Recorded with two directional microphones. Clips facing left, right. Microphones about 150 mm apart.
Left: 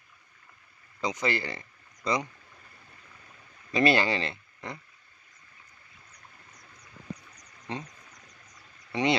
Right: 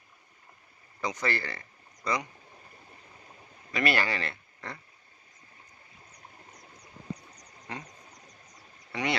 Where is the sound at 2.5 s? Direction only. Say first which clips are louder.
Right 3 dB; 30° right (ahead or behind).